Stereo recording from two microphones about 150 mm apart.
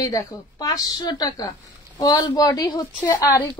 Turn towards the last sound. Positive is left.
turn(degrees=20)  # may be behind; listen again after turning